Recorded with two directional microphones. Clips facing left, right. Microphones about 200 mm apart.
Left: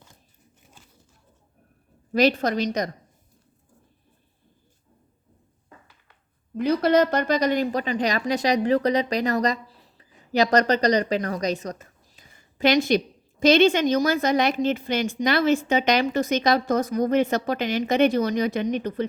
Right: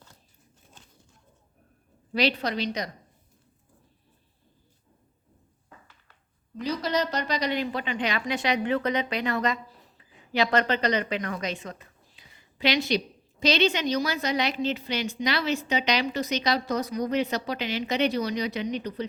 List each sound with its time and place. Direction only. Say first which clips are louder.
2.1 s a woman's voice: left 6 dB; 45° left (ahead or behind)
6.6 s a woman's voice: left 8 dB; 55° left (ahead or behind)